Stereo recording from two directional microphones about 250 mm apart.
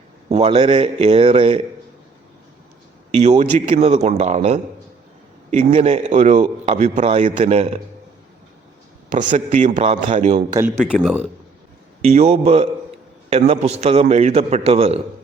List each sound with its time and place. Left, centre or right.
0.3 s a man's voice: right
3.1 s a man's voice: right
5.7 s a man's voice: right
9.3 s a man's voice: right
10.5 s speech: centre
12.0 s a man's voice: right